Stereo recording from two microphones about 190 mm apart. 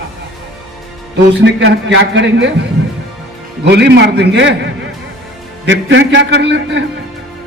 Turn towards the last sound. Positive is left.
turn(degrees=-65)  # may be behind; listen again after turning